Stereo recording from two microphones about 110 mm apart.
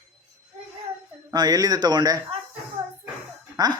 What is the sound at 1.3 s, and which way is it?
Speech, 35° right (ahead or behind).